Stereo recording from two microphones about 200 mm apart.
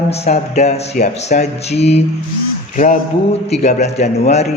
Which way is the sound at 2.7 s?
40° left (ahead or behind).